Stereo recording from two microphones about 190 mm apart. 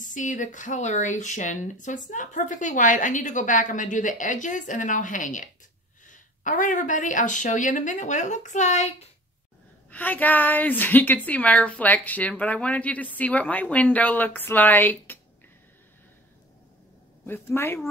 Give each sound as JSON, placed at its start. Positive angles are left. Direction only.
{"t": 0.0, "sound": "speech", "side_deg": 40}
{"t": 9.8, "sound": "a woman's voice", "side_deg": 10}
{"t": 17.3, "sound": "a woman's voice", "side_deg": 10}